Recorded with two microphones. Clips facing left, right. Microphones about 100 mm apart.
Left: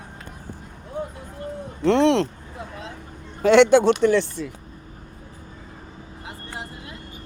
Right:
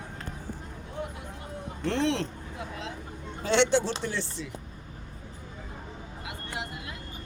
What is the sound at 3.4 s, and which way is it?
A man's voice, 60° left (ahead or behind).